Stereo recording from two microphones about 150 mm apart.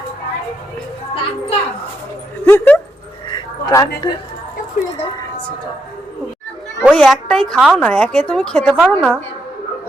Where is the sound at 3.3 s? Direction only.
25° left (ahead or behind).